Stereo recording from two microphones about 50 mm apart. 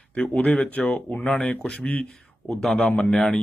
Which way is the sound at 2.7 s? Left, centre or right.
Centre.